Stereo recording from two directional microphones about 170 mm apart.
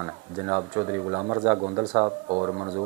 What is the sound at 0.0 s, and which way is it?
Speech, 20° right (ahead or behind).